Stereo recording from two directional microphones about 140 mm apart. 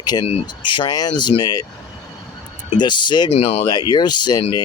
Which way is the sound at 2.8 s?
35° left (ahead or behind).